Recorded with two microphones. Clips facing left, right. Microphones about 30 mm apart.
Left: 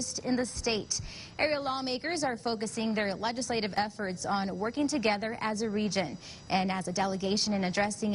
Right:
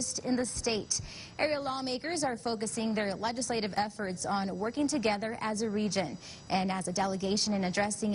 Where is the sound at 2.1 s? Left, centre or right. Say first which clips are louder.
Left 1 dB; centre.